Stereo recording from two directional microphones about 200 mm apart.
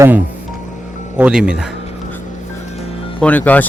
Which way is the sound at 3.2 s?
10° left (ahead or behind).